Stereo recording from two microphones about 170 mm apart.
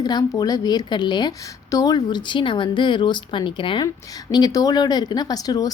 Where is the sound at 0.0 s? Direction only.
25° left (ahead or behind).